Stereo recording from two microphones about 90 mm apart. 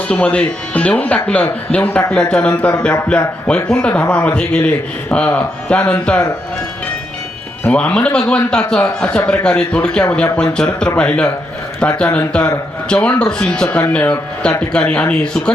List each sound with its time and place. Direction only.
0.1 s speech: 15° left (ahead or behind)
7.6 s speech: 15° left (ahead or behind)